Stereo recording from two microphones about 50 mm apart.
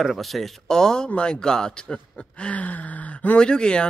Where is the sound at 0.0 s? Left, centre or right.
Centre; by 3.3 s left.